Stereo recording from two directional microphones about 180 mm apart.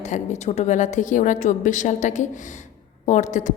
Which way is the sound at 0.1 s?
40° left (ahead or behind).